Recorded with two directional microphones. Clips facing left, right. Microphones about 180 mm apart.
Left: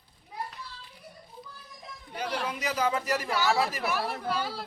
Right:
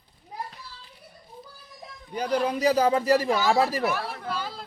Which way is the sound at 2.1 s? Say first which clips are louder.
Right 8 dB; 35° right (ahead or behind).